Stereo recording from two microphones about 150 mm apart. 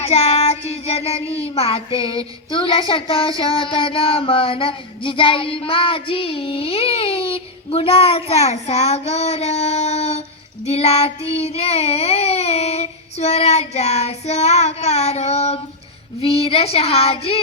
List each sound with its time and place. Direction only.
0.0 s child singing: 45° left (ahead or behind)